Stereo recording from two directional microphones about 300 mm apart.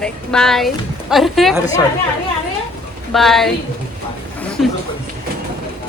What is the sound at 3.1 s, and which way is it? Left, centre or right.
Speech, centre.